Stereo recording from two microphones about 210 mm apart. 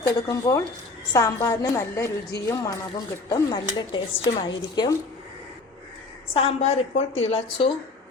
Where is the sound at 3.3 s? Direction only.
20° left (ahead or behind).